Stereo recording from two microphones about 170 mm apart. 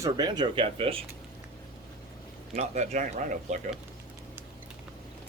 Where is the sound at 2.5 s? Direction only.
40° right (ahead or behind).